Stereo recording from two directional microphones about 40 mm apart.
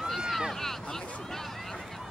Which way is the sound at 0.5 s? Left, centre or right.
Centre.